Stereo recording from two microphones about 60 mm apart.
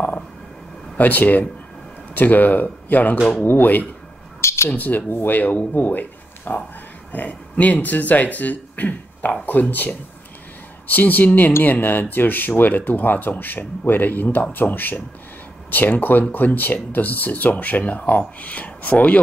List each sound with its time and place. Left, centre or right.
0.9 s speech: left
4.4 s a sound: left
4.6 s speech: left